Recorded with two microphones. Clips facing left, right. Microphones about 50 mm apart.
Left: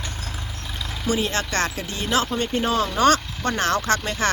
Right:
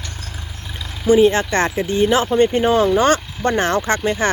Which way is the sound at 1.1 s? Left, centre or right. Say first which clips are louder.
Right 11 dB; centre.